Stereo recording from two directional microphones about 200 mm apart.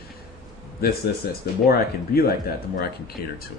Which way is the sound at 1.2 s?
50° left (ahead or behind).